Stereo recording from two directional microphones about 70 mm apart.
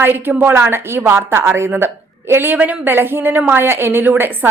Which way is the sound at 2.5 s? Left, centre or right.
Centre.